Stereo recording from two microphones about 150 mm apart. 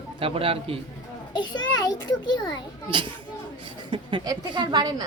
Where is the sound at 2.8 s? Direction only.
30° right (ahead or behind).